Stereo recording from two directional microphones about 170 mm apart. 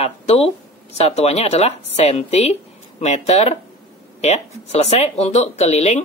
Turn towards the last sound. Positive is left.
turn(degrees=40)  # may be behind; listen again after turning